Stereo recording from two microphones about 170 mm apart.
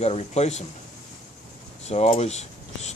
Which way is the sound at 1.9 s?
40° left (ahead or behind).